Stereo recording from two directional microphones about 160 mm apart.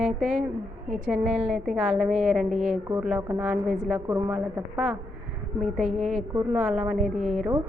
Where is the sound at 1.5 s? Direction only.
Centre (ahead or behind).